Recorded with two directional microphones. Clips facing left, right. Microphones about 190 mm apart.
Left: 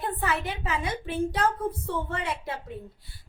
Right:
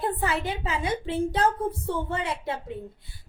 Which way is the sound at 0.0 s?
30° right (ahead or behind).